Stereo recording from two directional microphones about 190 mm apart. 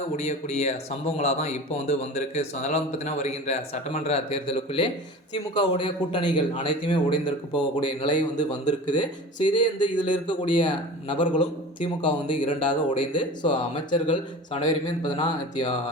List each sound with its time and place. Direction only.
0.2 s speech: 35° left (ahead or behind)
8.1 s speech: 40° left (ahead or behind)
9.4 s speech: 25° left (ahead or behind)